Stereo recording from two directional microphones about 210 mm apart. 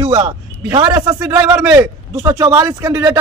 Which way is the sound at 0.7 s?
15° right (ahead or behind).